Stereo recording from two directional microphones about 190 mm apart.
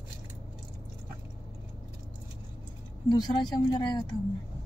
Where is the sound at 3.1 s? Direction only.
20° left (ahead or behind).